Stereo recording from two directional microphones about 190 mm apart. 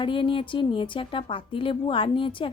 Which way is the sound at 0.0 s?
25° left (ahead or behind).